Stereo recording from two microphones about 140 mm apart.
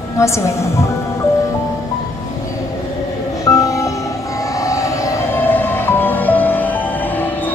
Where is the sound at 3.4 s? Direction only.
25° left (ahead or behind).